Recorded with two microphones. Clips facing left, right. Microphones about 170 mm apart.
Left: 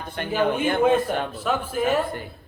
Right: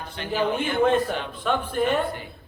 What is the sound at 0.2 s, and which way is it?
Speech, 50° left (ahead or behind).